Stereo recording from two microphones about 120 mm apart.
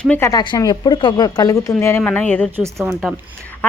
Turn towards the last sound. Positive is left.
turn(degrees=15)  # may be behind; listen again after turning